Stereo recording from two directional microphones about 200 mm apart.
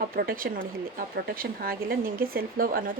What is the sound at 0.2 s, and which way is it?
Speech, 45° right (ahead or behind).